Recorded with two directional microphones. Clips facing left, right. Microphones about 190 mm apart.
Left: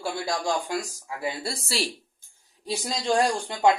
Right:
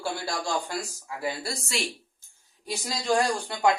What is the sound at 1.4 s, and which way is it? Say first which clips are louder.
Speech: left 2 dB; 30° left (ahead or behind).